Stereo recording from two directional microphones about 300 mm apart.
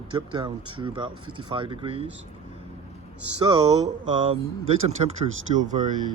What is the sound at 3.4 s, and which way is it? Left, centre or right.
Speech, centre.